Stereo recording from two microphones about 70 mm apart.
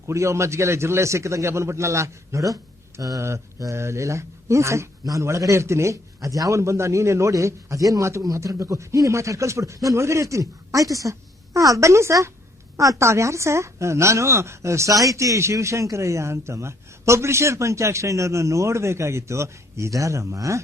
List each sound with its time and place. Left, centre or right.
0.1 s a woman's voice: right
6.1 s a woman's voice: right